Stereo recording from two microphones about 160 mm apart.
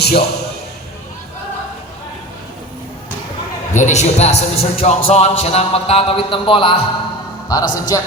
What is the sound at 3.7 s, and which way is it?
A man's voice, 45° left (ahead or behind).